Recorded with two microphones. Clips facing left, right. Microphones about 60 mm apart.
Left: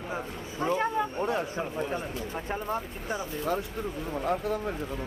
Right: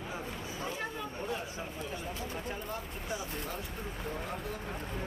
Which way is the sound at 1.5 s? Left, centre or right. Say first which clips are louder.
Left 9 dB; left.